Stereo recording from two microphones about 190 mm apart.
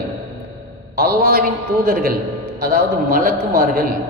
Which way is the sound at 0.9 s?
55° right (ahead or behind).